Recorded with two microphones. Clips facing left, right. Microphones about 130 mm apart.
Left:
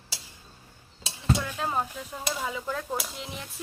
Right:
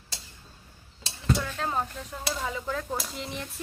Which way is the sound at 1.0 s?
10° left (ahead or behind).